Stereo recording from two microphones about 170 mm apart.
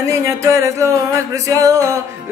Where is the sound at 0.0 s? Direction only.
15° right (ahead or behind).